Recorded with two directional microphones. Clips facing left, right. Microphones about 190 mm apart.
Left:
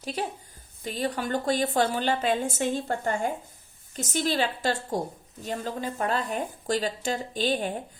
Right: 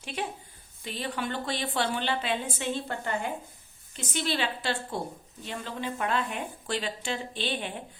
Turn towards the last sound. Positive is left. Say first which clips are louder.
# left 6 dB
turn(degrees=40)  # may be behind; listen again after turning